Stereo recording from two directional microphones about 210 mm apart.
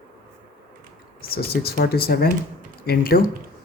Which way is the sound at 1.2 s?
45° left (ahead or behind).